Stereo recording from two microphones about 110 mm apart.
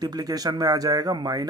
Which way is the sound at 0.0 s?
35° right (ahead or behind).